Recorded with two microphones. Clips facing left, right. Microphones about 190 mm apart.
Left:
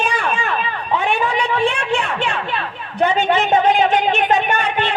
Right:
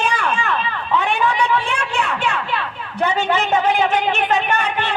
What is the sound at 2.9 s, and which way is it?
Speech, 15° left (ahead or behind).